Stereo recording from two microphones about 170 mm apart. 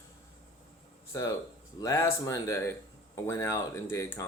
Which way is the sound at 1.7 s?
20° left (ahead or behind).